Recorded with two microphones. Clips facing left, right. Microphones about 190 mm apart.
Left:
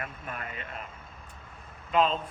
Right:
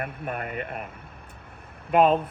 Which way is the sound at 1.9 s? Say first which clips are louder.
Right 6 dB; 60° right (ahead or behind).